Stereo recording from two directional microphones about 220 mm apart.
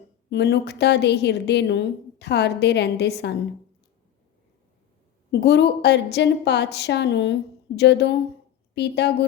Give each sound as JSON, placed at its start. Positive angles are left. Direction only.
{"t": 0.3, "sound": "a woman's voice", "side_deg": 50}
{"t": 5.3, "sound": "a woman's voice", "side_deg": 50}